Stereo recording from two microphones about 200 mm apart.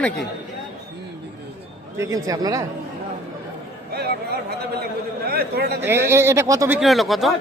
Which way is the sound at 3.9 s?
50° right (ahead or behind).